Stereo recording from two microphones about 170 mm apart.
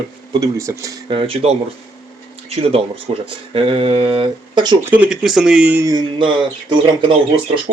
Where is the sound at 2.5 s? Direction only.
35° right (ahead or behind).